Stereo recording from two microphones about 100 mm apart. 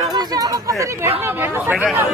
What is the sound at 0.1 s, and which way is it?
Speech, 35° right (ahead or behind).